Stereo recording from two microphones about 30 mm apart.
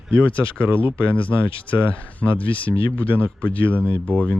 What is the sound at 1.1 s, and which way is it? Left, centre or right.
Speech, left.